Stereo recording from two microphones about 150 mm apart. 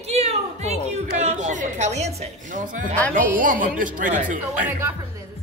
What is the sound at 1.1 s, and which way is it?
A woman's voice, 50° right (ahead or behind).